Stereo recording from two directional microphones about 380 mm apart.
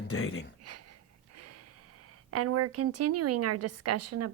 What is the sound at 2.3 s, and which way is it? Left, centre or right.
A woman's voice, right.